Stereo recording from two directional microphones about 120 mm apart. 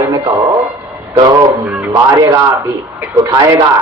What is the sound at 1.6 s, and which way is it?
Speech, 10° right (ahead or behind).